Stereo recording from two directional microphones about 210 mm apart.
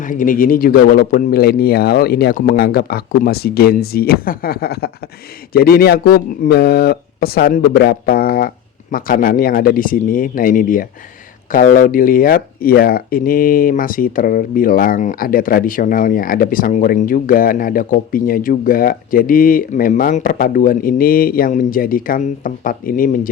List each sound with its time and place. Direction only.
0.0 s speech: 40° left (ahead or behind)